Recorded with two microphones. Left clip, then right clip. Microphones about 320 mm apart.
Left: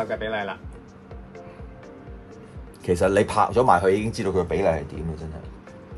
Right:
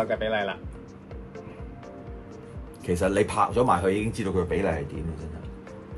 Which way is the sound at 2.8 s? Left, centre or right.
Left.